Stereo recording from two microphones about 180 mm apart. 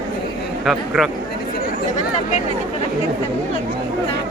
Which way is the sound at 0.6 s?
Centre (ahead or behind).